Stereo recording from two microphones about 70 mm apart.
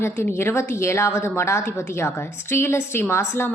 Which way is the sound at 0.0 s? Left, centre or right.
Left.